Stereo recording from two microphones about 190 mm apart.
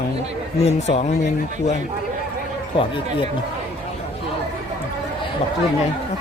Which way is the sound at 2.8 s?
25° left (ahead or behind).